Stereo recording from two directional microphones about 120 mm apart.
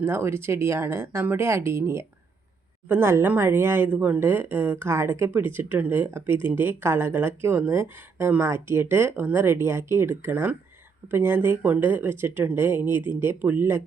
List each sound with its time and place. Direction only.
0.0 s speech: 20° right (ahead or behind)